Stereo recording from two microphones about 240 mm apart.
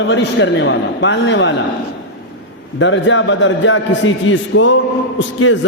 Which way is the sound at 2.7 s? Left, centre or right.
Left.